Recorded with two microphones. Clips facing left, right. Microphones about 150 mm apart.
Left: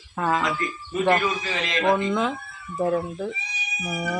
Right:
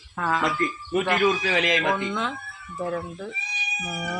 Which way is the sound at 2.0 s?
5° left (ahead or behind).